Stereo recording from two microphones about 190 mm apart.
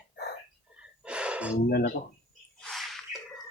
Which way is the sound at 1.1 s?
5° right (ahead or behind).